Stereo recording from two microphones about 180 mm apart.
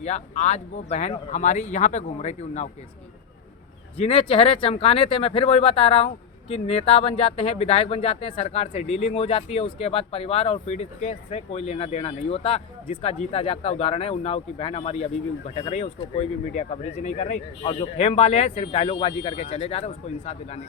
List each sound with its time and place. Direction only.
0.0 s speech: 40° left (ahead or behind)
3.9 s speech: 30° left (ahead or behind)